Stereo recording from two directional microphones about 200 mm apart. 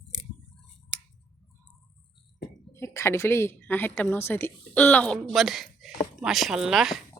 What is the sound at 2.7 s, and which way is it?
A woman's voice, 15° left (ahead or behind).